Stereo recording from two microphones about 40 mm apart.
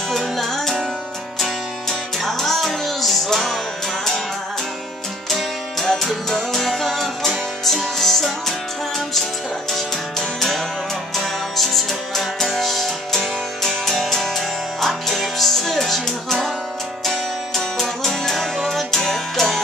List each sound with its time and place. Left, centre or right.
0.1 s music: centre
5.3 s music: centre
9.7 s music: centre